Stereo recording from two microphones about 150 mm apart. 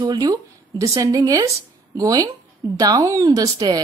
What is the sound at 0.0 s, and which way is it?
A woman's voice, 25° right (ahead or behind).